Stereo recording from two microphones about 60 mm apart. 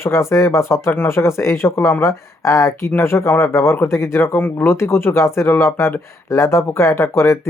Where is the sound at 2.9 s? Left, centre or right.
Left.